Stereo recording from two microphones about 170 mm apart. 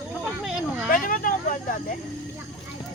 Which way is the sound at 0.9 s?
55° left (ahead or behind).